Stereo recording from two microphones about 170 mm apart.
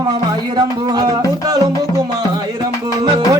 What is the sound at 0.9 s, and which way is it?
Music, 20° right (ahead or behind).